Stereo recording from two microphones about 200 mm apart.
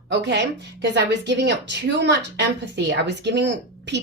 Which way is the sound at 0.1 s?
60° right (ahead or behind).